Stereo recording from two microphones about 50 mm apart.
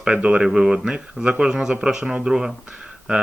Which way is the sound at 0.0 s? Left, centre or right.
Centre.